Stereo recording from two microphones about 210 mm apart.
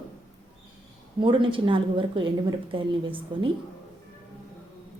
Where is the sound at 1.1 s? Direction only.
25° right (ahead or behind).